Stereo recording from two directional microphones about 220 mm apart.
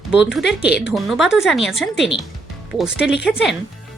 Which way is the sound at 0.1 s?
5° right (ahead or behind).